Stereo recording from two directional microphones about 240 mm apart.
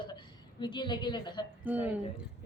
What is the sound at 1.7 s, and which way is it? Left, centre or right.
Speech, centre.